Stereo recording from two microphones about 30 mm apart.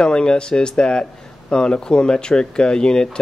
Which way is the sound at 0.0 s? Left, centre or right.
Left.